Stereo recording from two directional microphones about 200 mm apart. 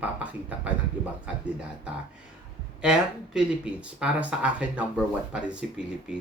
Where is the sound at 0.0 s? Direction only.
5° right (ahead or behind).